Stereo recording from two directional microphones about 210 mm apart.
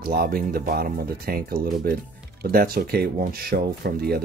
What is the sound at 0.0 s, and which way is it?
Speech, 45° right (ahead or behind).